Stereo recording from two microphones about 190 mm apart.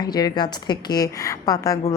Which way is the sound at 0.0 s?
20° left (ahead or behind).